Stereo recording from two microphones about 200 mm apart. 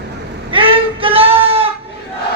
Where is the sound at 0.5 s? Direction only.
25° right (ahead or behind).